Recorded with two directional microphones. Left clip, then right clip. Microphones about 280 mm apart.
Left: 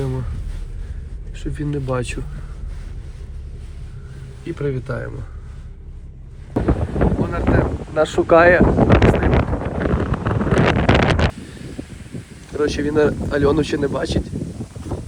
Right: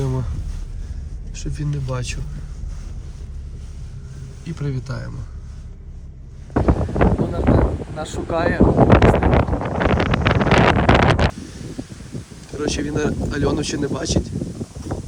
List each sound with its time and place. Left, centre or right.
0.0 s a sound: centre
1.4 s speech: centre
4.4 s speech: centre
7.0 s wind noise: centre
10.0 s wind noise: right
10.4 s wind noise: centre
12.5 s speech: centre